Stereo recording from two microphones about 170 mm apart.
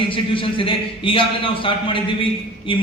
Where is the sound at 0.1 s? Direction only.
30° left (ahead or behind).